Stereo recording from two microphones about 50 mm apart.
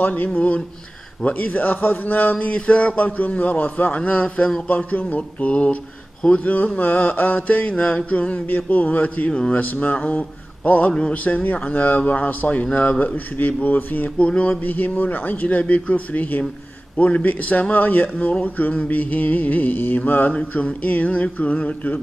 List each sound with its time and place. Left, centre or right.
0.0 s speech: left
0.3 s a man's voice: left
2.3 s a man's voice: left
8.5 s a man's voice: left
14.1 s a man's voice: left
14.6 s a man's voice: left